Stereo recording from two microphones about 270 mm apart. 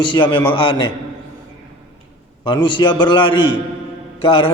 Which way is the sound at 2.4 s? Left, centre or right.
Centre.